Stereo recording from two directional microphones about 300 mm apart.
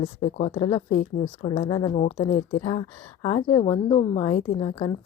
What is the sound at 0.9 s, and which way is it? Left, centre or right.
Speech, left.